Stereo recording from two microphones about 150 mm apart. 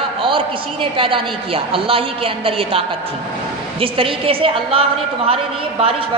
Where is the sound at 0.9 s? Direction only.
35° right (ahead or behind).